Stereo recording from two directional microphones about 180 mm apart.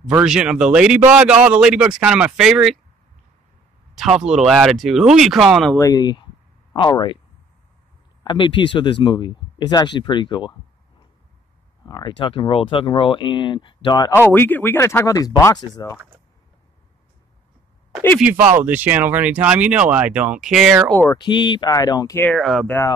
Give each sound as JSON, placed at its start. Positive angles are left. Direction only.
{"t": 0.1, "sound": "a man's voice", "side_deg": -5}
{"t": 4.2, "sound": "a man's voice", "side_deg": -5}
{"t": 5.8, "sound": "speech", "side_deg": 20}
{"t": 8.2, "sound": "speech", "side_deg": 25}
{"t": 11.8, "sound": "speech", "side_deg": 25}
{"t": 14.3, "sound": "speech", "side_deg": 10}
{"t": 18.2, "sound": "speech", "side_deg": -10}
{"t": 20.9, "sound": "speech", "side_deg": 15}
{"t": 21.2, "sound": "speech", "side_deg": 25}
{"t": 22.3, "sound": "a man's voice", "side_deg": 0}